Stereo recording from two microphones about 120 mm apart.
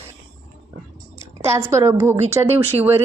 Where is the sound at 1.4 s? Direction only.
25° right (ahead or behind).